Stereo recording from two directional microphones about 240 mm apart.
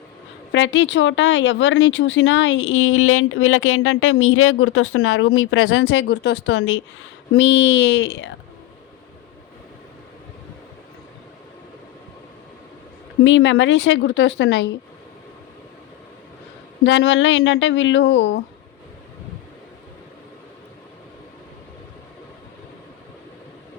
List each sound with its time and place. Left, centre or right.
0.5 s speech: left
13.2 s speech: left
16.8 s speech: left